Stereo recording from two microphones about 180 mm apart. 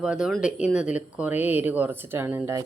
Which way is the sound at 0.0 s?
5° right (ahead or behind).